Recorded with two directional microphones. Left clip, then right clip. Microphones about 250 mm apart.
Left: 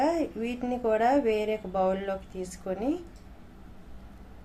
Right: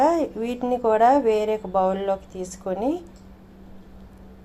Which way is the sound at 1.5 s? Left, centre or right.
Centre.